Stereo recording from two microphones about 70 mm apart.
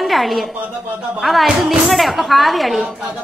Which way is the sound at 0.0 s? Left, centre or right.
Centre.